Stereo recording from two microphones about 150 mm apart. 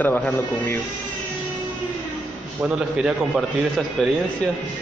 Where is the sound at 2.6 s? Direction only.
5° right (ahead or behind).